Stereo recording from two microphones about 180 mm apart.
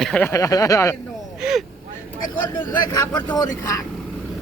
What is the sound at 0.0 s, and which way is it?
Speech, 5° left (ahead or behind).